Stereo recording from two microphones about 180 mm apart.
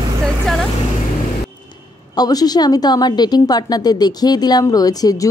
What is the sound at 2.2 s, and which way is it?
A woman's voice, 20° left (ahead or behind).